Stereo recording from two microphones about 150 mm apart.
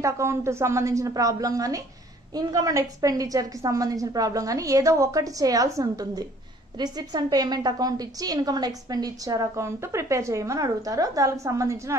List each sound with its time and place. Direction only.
0.0 s a woman's voice: 20° right (ahead or behind)